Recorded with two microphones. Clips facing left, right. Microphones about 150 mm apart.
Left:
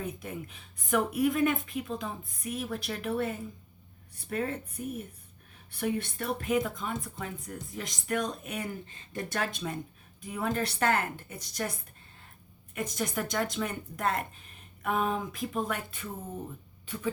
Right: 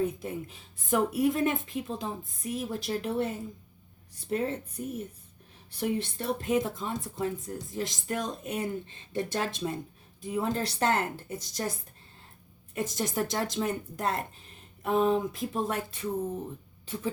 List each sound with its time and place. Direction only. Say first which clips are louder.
0.0 s speech: right 6 dB; 25° right (ahead or behind)
5.8 s speech: right 1 dB; 25° right (ahead or behind)
12.7 s speech: right 2 dB; 30° right (ahead or behind)